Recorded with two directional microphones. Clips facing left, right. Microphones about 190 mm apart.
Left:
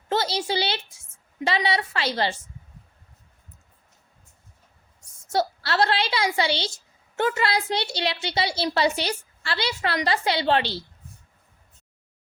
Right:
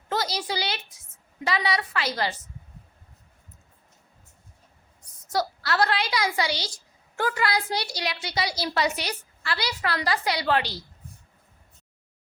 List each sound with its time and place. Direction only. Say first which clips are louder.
0.1 s a sound: left 3 dB; 30° left (ahead or behind)
1.5 s a woman's voice: left 2 dB; 25° left (ahead or behind)
5.2 s a woman's voice: left 3 dB; 25° left (ahead or behind)